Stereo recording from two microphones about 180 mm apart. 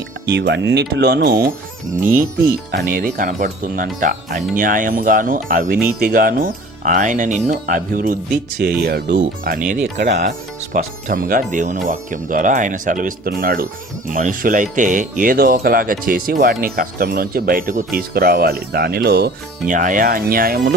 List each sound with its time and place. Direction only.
0.3 s speech: 65° right (ahead or behind)
2.7 s speech: 50° right (ahead or behind)
8.6 s speech: 60° right (ahead or behind)
9.1 s speech: 50° right (ahead or behind)
10.8 s speech: 50° right (ahead or behind)
19.6 s speech: 45° right (ahead or behind)